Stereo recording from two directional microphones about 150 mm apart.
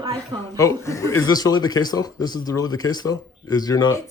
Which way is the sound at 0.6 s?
20° left (ahead or behind).